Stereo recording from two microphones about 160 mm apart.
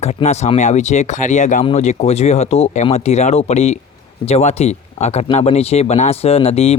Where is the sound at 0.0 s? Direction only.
45° left (ahead or behind).